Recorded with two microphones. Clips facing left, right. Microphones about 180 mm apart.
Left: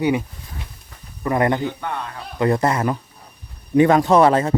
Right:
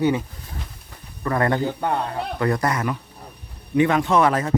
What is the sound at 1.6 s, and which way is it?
Speech, 40° right (ahead or behind).